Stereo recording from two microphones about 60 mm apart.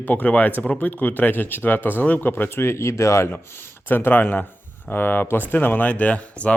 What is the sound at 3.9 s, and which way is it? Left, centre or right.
Speech, left.